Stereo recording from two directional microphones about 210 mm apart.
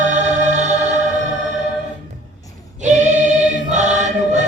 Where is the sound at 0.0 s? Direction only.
35° right (ahead or behind).